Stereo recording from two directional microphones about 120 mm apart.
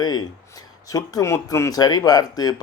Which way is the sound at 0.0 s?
35° left (ahead or behind).